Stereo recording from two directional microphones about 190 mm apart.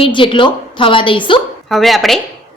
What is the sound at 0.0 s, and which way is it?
A woman's voice, 25° left (ahead or behind).